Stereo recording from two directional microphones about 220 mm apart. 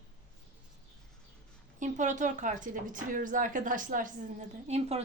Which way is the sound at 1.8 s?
35° right (ahead or behind).